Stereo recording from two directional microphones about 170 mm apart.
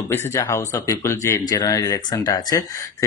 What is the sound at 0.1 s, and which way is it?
Speech, 15° left (ahead or behind).